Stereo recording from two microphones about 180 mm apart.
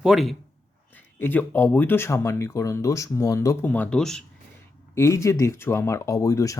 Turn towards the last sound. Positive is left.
turn(degrees=20)  # may be behind; listen again after turning